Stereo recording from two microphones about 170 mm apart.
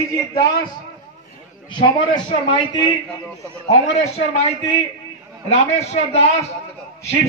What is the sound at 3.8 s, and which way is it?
Speech, 40° left (ahead or behind).